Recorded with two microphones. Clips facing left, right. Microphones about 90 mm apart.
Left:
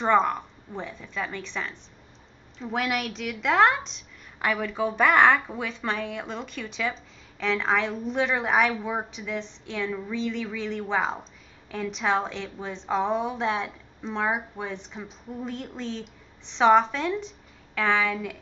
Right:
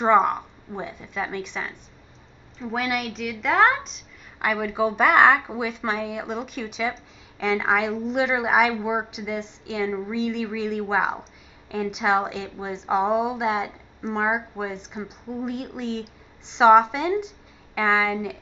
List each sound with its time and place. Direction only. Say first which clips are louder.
0.0 s a woman's voice: right 3 dB; 15° right (ahead or behind)
2.6 s a woman's voice: right 1 dB; centre (ahead or behind)